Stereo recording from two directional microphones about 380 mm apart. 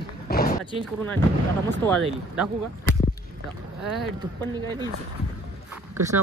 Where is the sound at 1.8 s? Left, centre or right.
Centre.